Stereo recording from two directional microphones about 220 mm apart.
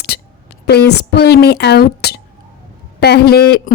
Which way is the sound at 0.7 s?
45° left (ahead or behind).